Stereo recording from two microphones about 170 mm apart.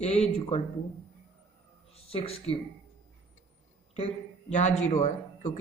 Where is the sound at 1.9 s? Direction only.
35° left (ahead or behind).